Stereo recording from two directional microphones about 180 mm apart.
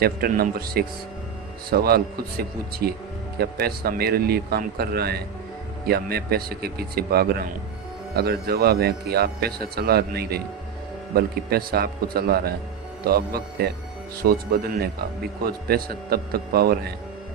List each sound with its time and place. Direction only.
0.0 s speech: 55° right (ahead or behind)
15.4 s speech: 60° right (ahead or behind)